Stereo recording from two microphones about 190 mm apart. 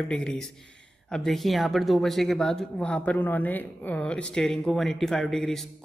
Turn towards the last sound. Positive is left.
turn(degrees=0)  # may be behind; listen again after turning